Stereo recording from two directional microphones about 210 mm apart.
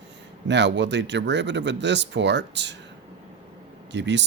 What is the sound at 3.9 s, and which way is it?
Speech, 55° right (ahead or behind).